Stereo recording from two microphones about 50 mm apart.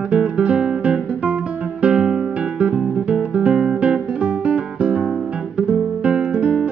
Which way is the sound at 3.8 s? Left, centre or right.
Centre.